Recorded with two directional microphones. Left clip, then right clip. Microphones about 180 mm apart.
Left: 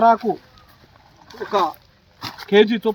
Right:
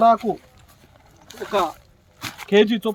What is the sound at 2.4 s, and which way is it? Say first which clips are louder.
Speech: left 2 dB; 35° right (ahead or behind).